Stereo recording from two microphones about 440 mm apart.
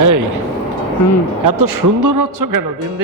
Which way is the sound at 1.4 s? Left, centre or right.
Right.